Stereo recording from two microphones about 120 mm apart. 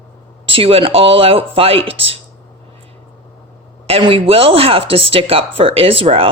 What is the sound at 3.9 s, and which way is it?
Speech, 50° right (ahead or behind).